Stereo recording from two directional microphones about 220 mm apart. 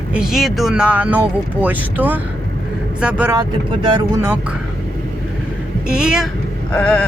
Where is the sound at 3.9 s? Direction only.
20° right (ahead or behind).